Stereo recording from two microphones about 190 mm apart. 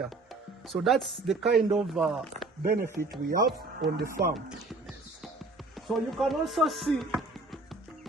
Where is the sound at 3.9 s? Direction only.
50° right (ahead or behind).